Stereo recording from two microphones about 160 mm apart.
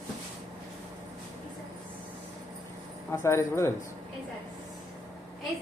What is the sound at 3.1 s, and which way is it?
Speech, 15° left (ahead or behind).